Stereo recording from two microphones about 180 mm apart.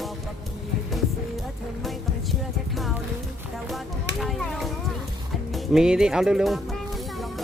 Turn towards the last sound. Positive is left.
turn(degrees=0)  # may be behind; listen again after turning